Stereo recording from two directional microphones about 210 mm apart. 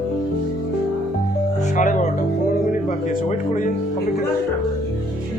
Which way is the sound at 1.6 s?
35° left (ahead or behind).